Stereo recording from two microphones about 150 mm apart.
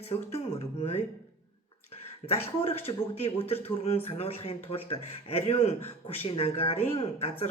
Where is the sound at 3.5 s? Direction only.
15° left (ahead or behind).